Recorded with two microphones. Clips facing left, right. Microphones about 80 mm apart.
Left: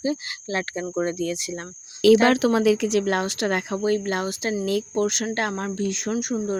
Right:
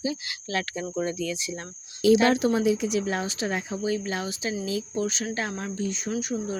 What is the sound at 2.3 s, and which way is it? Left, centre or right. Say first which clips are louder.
A woman's voice: left 4 dB; left.